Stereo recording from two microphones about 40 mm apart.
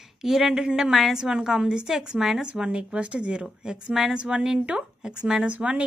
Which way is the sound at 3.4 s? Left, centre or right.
Centre.